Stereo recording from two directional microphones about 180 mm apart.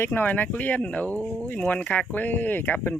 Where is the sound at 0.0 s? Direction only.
10° left (ahead or behind).